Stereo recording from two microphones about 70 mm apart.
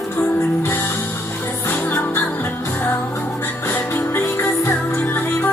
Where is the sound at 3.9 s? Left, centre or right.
Left.